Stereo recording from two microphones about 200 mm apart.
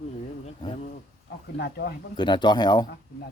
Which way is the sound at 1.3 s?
50° left (ahead or behind).